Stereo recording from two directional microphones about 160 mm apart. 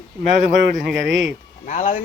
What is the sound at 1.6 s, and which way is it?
Speech, 50° left (ahead or behind).